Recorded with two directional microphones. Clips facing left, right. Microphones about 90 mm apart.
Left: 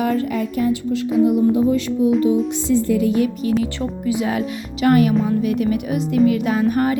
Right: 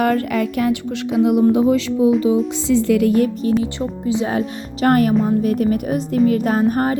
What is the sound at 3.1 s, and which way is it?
Music, 45° right (ahead or behind).